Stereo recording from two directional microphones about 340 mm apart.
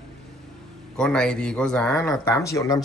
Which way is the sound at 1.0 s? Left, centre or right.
Centre.